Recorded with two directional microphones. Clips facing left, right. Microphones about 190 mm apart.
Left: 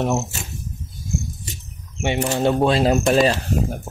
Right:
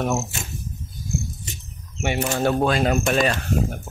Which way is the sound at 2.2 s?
25° left (ahead or behind).